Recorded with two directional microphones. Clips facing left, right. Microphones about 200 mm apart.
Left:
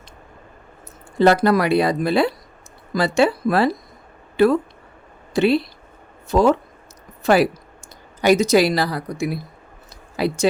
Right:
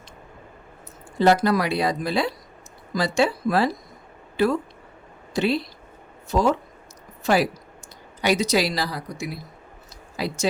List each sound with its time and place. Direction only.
1.2 s speech: 60° left (ahead or behind)
8.2 s speech: 50° left (ahead or behind)